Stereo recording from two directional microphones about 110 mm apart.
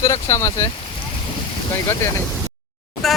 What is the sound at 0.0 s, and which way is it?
Speech, 30° left (ahead or behind).